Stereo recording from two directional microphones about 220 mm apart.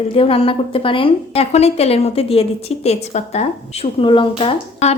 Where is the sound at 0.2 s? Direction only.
25° left (ahead or behind).